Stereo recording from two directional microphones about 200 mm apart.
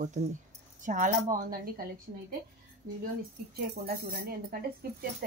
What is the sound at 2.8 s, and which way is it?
A woman's voice, 50° right (ahead or behind).